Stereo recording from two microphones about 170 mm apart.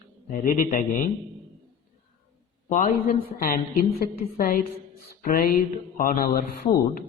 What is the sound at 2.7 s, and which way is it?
A woman's voice, 50° left (ahead or behind).